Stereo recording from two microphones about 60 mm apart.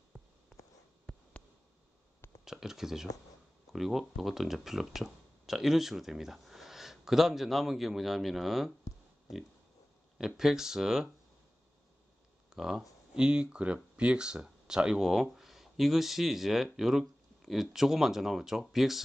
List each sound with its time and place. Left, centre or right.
0.1 s a sound: right
1.1 s a sound: centre
2.4 s speech: centre
10.1 s speech: centre
12.4 s speech: centre
13.1 s speech: centre